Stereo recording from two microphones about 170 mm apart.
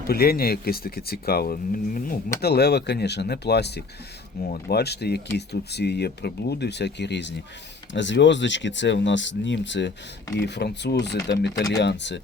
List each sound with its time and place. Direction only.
0.1 s speech: 65° left (ahead or behind)
2.4 s speech: 75° left (ahead or behind)
4.4 s speech: 65° left (ahead or behind); by 9.9 s 90° left
10.3 s speech: 80° left